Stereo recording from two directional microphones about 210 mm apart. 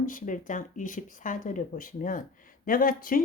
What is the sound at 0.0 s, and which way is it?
Speech, 40° left (ahead or behind).